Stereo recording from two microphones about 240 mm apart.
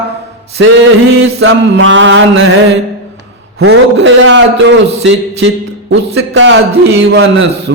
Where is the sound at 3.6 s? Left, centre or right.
Right.